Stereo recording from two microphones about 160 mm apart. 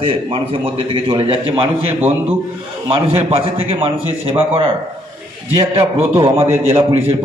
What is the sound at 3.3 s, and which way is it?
Speech, 35° right (ahead or behind).